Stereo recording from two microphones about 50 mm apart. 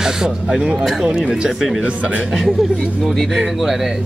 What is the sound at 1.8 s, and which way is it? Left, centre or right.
Speech, right.